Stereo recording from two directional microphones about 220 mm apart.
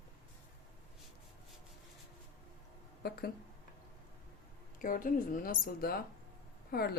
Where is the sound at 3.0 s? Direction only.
45° left (ahead or behind).